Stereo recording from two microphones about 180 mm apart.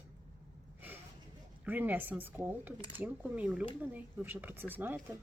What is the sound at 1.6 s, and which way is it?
Speech, 10° right (ahead or behind).